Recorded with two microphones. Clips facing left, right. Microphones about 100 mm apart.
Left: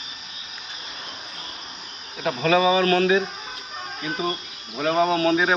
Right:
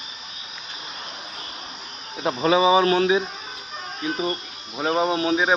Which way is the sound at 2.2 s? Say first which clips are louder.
Right 1 dB; 25° right (ahead or behind).